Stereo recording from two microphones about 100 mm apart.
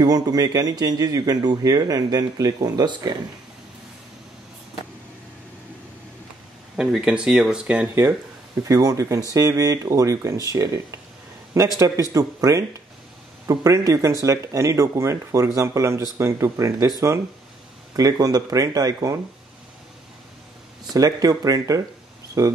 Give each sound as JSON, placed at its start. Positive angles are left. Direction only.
{"t": 0.0, "sound": "speech", "side_deg": -40}
{"t": 6.8, "sound": "speech", "side_deg": -10}
{"t": 8.6, "sound": "speech", "side_deg": -35}
{"t": 17.9, "sound": "speech", "side_deg": -40}
{"t": 20.9, "sound": "speech", "side_deg": -40}